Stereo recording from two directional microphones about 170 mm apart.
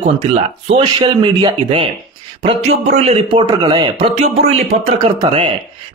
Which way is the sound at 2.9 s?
35° right (ahead or behind).